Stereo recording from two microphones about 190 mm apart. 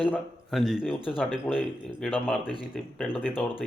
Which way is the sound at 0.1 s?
Centre (ahead or behind).